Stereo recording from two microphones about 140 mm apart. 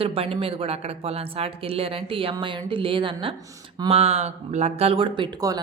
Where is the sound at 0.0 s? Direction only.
45° right (ahead or behind).